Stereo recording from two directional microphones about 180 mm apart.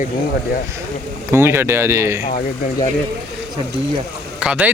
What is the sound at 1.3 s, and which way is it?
Speech, 15° right (ahead or behind).